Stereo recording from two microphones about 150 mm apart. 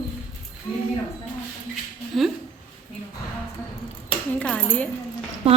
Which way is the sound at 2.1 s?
Centre (ahead or behind).